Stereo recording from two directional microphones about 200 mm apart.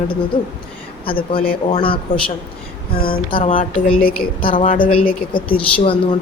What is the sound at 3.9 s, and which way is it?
Speech, 45° left (ahead or behind).